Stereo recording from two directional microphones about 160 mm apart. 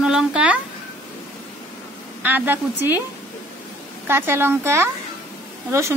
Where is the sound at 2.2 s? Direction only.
10° right (ahead or behind).